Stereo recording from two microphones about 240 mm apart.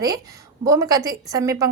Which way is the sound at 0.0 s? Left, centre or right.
Centre.